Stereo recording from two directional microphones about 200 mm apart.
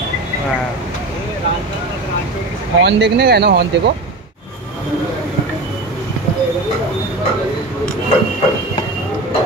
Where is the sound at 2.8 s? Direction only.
60° right (ahead or behind).